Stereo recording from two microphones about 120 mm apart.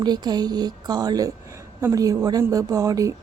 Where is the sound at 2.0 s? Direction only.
30° right (ahead or behind).